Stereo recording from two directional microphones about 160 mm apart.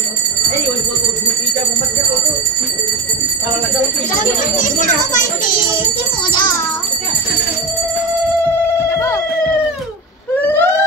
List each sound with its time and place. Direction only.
4.6 s children playing: 55° left (ahead or behind)
8.8 s cat: 15° left (ahead or behind)
10.4 s a sound: 10° left (ahead or behind)